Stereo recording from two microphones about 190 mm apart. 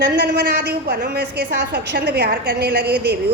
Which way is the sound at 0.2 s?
60° right (ahead or behind).